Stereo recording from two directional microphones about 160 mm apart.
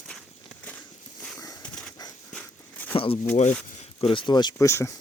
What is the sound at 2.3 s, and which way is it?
Walk, 10° left (ahead or behind).